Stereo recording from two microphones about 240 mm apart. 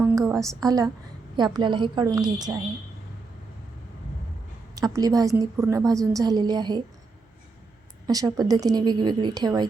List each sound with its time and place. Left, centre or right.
0.0 s a sound: centre
1.4 s a woman's voice: centre
4.7 s a woman's voice: centre
8.0 s a woman's voice: centre